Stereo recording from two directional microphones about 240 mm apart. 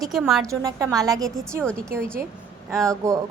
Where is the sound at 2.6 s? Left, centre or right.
Centre.